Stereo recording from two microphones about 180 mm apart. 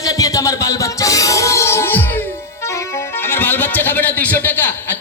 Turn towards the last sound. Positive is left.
turn(degrees=10)  # may be behind; listen again after turning